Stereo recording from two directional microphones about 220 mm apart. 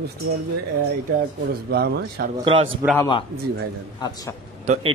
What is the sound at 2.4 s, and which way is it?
Speech, 25° right (ahead or behind).